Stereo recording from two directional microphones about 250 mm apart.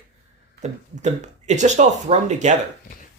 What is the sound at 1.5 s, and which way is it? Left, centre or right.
Speech, right.